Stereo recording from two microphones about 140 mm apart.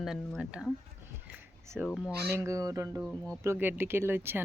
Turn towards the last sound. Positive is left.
turn(degrees=-15)  # may be behind; listen again after turning